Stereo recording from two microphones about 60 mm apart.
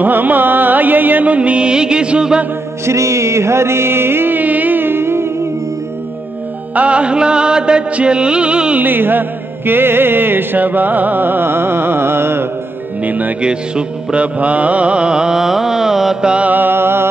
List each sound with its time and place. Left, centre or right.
0.0 s music: right
2.8 s music: right
6.7 s music: right
8.8 s music: right
13.0 s speech: right
13.4 s music: centre
16.4 s music: right